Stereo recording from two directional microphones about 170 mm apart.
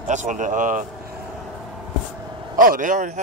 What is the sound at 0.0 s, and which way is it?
Speech, 45° right (ahead or behind).